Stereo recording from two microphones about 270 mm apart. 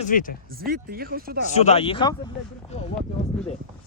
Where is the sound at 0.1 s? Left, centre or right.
Left.